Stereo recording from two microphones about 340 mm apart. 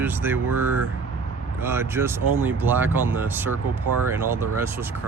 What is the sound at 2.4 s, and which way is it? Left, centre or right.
Speech, centre.